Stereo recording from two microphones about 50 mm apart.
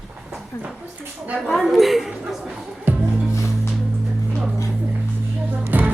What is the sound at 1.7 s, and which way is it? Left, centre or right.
Speech, centre.